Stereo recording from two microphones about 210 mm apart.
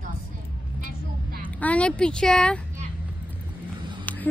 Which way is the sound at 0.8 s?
40° right (ahead or behind).